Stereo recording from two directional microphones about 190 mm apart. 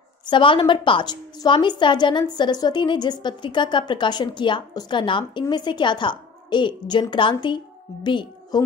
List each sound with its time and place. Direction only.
0.3 s a woman's voice: 25° left (ahead or behind)